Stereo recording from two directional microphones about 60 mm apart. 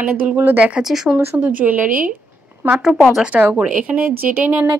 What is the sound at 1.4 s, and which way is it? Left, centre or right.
Speech, right.